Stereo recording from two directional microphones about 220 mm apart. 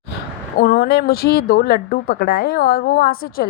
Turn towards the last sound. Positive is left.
turn(degrees=40)  # may be behind; listen again after turning